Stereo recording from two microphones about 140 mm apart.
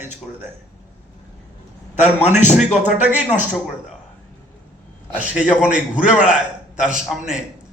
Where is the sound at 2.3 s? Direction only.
60° left (ahead or behind).